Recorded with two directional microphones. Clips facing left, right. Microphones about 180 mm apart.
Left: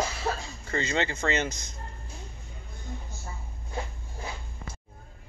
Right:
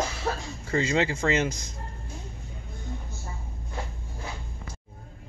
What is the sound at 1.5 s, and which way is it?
Speech, 30° right (ahead or behind).